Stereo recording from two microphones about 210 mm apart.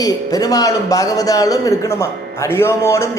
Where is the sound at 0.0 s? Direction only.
15° left (ahead or behind).